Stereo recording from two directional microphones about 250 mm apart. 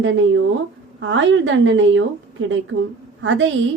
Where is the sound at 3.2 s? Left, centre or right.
Right.